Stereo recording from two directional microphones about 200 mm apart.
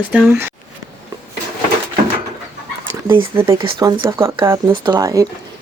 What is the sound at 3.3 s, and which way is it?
Speech, 15° right (ahead or behind).